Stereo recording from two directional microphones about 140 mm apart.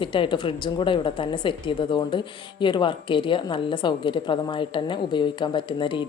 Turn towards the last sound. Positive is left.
turn(degrees=35)  # may be behind; listen again after turning